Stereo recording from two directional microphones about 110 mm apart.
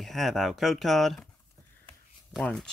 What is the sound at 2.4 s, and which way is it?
Speech, 10° left (ahead or behind).